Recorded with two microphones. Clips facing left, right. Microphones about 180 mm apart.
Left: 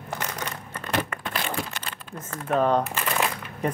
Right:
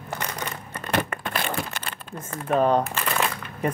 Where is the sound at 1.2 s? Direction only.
55° right (ahead or behind).